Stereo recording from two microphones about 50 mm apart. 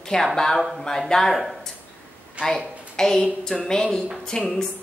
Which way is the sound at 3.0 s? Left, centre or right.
Centre.